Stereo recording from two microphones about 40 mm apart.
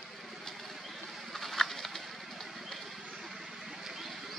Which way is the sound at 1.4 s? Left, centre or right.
Centre.